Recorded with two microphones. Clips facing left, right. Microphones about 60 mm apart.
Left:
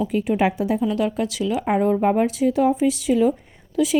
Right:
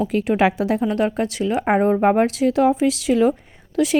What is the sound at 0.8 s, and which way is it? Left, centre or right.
A woman's voice, right.